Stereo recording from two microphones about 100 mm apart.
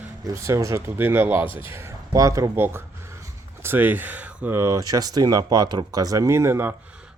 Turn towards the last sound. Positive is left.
turn(degrees=-25)  # may be behind; listen again after turning